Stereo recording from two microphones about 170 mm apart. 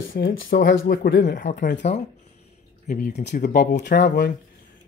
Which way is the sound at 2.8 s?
50° left (ahead or behind).